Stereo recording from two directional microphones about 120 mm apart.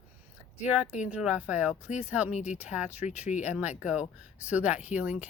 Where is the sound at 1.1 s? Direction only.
10° right (ahead or behind).